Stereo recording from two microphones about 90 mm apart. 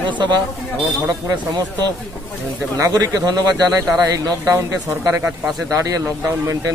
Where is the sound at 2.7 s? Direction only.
40° right (ahead or behind).